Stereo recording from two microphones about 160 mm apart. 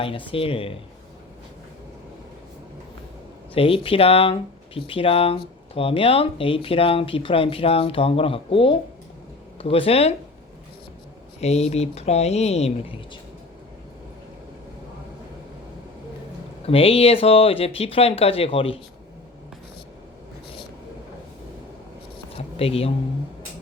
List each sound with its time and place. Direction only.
0.0 s speech: 35° left (ahead or behind)
3.5 s speech: 35° left (ahead or behind)
11.3 s speech: 40° left (ahead or behind)
16.6 s speech: 35° left (ahead or behind)
22.5 s speech: 35° left (ahead or behind)